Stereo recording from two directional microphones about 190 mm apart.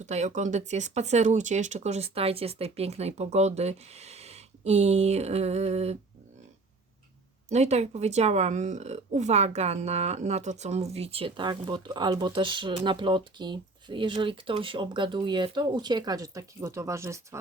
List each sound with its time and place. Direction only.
0.0 s speech: 35° right (ahead or behind)
7.5 s a woman's voice: 35° right (ahead or behind); by 17.2 s 15° right (ahead or behind)